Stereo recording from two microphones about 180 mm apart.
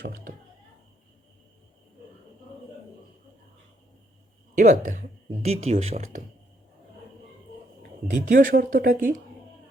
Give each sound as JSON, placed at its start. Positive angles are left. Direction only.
{"t": 4.5, "sound": "speech", "side_deg": -45}
{"t": 7.8, "sound": "speech", "side_deg": -55}